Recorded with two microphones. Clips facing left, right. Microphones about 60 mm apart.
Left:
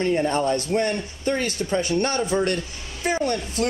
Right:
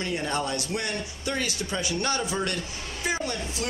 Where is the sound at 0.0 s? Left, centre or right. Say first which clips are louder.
Left 7 dB; left.